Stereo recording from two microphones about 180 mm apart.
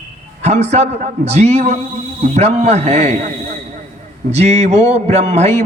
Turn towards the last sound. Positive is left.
turn(degrees=-35)  # may be behind; listen again after turning